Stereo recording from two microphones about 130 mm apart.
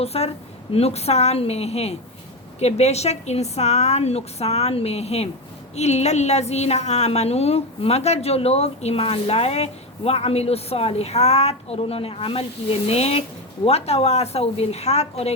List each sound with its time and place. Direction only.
0.0 s a woman's voice: 50° left (ahead or behind)